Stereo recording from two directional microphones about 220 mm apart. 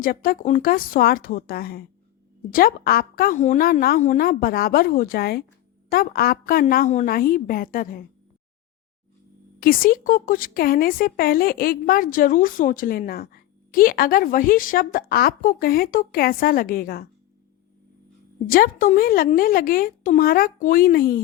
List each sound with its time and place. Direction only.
0.0 s speech: 40° left (ahead or behind)
9.6 s speech: 40° left (ahead or behind)
18.4 s speech: 40° left (ahead or behind)